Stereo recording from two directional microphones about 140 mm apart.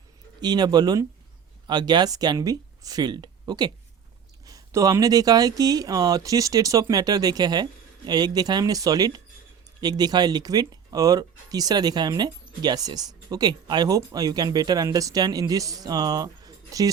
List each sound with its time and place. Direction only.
0.4 s speech: 30° right (ahead or behind)